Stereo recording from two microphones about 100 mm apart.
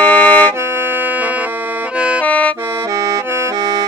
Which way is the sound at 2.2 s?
15° left (ahead or behind).